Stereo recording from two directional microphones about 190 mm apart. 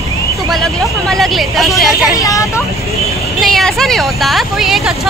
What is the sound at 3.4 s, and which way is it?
Speech, centre (ahead or behind).